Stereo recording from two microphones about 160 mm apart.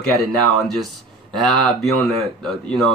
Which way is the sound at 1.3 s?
Centre (ahead or behind).